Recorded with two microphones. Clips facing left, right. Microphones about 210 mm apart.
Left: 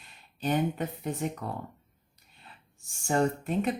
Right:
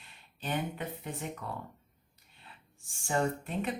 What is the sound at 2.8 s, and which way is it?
Speech, 40° left (ahead or behind).